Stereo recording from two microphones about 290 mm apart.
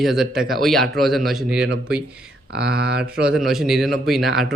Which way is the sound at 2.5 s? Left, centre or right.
Right.